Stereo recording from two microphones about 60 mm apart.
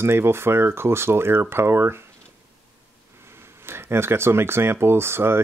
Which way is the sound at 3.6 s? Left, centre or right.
Right.